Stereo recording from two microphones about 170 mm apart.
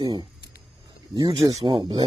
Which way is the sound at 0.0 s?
25° right (ahead or behind).